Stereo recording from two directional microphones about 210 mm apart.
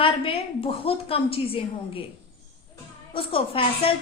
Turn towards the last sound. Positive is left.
turn(degrees=25)  # may be behind; listen again after turning